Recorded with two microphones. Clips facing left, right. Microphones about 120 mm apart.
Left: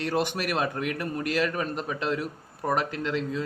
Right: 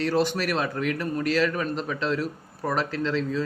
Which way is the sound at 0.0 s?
20° left (ahead or behind).